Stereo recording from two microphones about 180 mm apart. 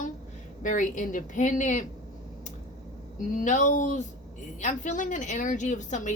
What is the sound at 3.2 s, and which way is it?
A woman's voice, 45° left (ahead or behind).